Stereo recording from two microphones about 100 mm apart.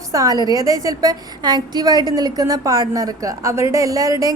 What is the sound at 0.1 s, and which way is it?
A woman's voice, 35° right (ahead or behind).